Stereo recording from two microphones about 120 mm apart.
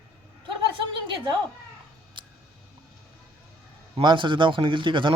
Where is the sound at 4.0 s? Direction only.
40° right (ahead or behind).